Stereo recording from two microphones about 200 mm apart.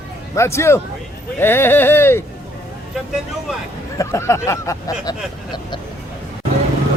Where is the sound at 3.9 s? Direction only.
15° left (ahead or behind).